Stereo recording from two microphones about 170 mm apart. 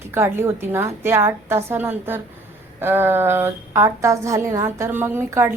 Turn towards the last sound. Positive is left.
turn(degrees=-15)  # may be behind; listen again after turning